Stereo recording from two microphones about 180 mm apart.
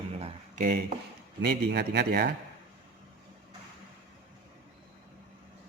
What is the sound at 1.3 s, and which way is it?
Speech, 65° right (ahead or behind).